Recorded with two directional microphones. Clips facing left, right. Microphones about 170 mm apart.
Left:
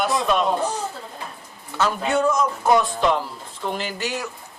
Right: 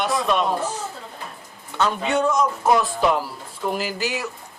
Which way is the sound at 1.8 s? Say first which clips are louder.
Even; centre (ahead or behind).